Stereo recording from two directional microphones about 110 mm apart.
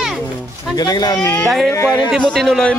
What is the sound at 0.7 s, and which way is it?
Speech, 35° left (ahead or behind).